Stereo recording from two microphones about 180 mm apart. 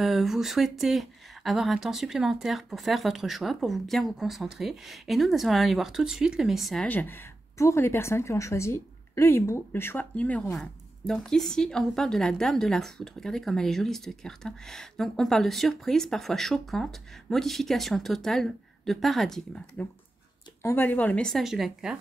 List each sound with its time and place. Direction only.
0.0 s speech: centre (ahead or behind)
20.6 s speech: 10° left (ahead or behind)